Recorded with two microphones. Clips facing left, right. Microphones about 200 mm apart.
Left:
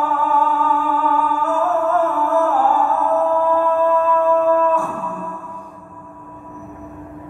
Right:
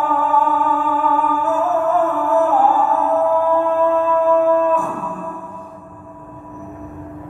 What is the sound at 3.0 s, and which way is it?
Music, 15° right (ahead or behind).